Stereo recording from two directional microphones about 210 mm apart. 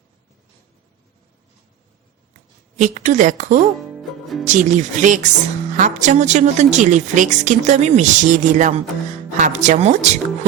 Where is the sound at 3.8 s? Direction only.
Centre (ahead or behind).